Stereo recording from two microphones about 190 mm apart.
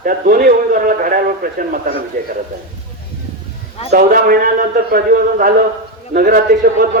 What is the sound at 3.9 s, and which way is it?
A man's voice, 50° right (ahead or behind).